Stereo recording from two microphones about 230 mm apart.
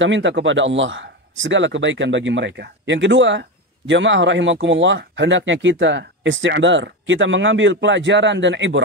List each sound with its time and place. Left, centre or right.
0.0 s speech: right